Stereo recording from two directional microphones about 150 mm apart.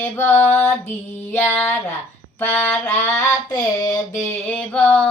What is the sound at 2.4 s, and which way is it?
Child singing, 15° left (ahead or behind).